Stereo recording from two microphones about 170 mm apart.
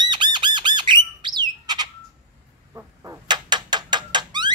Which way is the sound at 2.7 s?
15° right (ahead or behind).